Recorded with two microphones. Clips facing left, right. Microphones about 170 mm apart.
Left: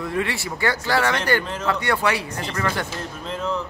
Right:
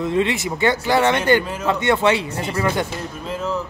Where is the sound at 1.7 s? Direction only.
20° right (ahead or behind).